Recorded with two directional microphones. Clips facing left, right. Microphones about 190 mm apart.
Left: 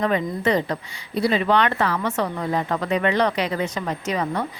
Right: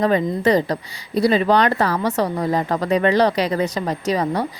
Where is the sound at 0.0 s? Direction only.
35° right (ahead or behind).